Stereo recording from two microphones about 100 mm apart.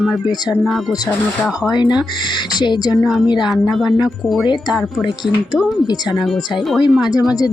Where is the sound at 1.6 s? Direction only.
45° left (ahead or behind).